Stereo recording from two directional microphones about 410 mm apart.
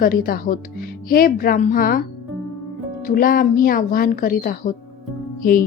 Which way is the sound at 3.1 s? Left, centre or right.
Left.